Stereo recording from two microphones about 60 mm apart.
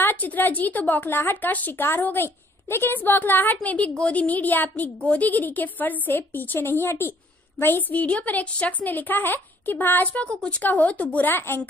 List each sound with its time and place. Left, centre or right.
0.0 s a woman's voice: left